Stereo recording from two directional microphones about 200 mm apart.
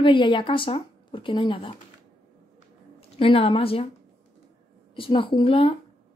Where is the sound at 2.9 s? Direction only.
30° left (ahead or behind).